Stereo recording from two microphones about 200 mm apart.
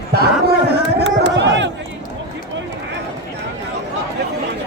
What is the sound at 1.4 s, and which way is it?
Crowd, 60° right (ahead or behind).